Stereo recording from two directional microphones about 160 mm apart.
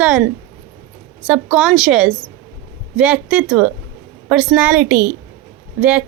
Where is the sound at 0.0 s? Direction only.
5° right (ahead or behind).